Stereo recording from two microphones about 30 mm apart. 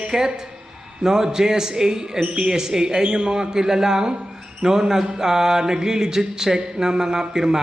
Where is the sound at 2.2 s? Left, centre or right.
Right.